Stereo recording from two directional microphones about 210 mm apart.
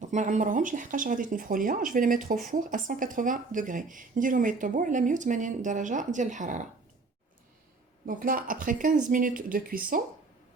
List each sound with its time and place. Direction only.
0.0 s a woman's voice: 35° right (ahead or behind)
8.0 s a woman's voice: 40° right (ahead or behind)